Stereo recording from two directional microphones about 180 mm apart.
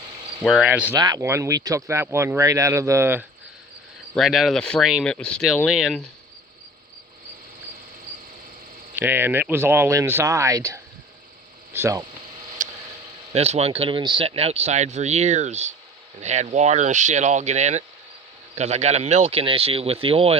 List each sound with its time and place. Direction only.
0.4 s speech: centre (ahead or behind)
0.7 s speech: 10° right (ahead or behind)
4.1 s speech: centre (ahead or behind)
9.0 s speech: 10° right (ahead or behind)
12.6 s a sound: 45° right (ahead or behind)
13.3 s speech: 35° right (ahead or behind)